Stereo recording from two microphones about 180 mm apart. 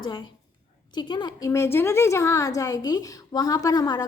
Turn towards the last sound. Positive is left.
turn(degrees=20)  # may be behind; listen again after turning